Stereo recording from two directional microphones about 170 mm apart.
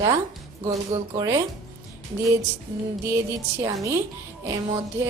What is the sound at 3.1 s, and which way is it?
Speech, 15° right (ahead or behind).